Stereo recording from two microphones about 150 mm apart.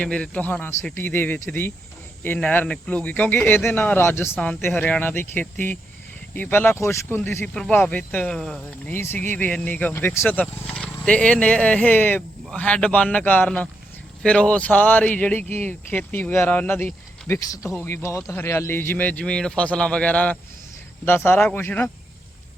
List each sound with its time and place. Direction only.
0.0 s speech: 10° left (ahead or behind)
7.5 s speech: 5° left (ahead or behind)
8.9 s speech: 15° left (ahead or behind)